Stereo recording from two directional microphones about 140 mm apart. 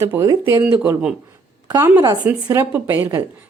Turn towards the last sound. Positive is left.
turn(degrees=-15)  # may be behind; listen again after turning